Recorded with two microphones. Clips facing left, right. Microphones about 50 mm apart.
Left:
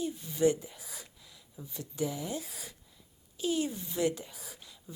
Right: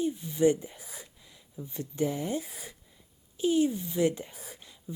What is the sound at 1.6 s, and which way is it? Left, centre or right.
Speech, right.